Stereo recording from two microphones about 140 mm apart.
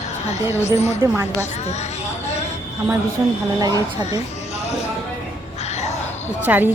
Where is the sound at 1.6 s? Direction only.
55° left (ahead or behind).